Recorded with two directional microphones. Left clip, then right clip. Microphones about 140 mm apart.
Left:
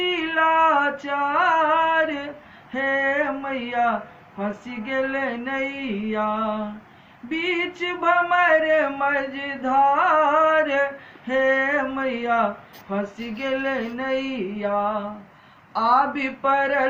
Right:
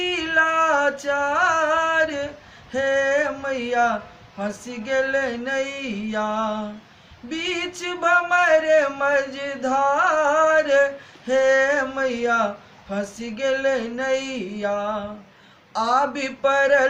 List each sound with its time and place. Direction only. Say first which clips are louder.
0.0 s music: right 1 dB; 40° right (ahead or behind)
2.7 s male singing: right 2 dB; 40° right (ahead or behind)
4.9 s speech: right 3 dB; 40° right (ahead or behind)